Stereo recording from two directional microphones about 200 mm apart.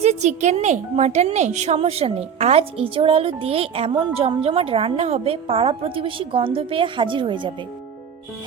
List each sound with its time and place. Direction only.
0.0 s a woman's voice: 35° right (ahead or behind)